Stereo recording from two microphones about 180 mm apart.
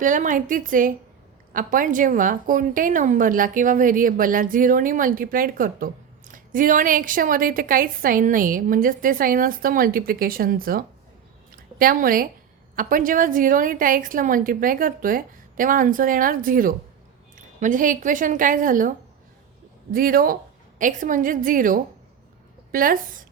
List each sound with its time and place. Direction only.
0.0 s a woman's voice: 45° right (ahead or behind)